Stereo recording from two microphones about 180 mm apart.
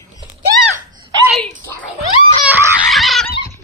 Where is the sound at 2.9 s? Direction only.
Centre (ahead or behind).